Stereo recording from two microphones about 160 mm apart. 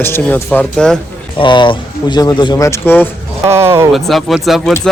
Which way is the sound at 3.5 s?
15° right (ahead or behind).